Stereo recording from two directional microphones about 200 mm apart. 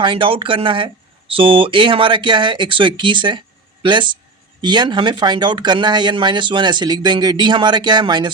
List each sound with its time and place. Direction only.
0.0 s speech: 25° right (ahead or behind)